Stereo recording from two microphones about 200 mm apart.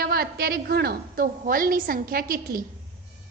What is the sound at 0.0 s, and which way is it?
A woman's voice, 50° right (ahead or behind).